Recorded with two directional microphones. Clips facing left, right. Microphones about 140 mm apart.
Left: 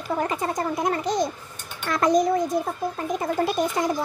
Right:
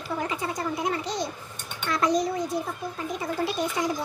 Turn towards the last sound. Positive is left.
turn(degrees=50)  # may be behind; listen again after turning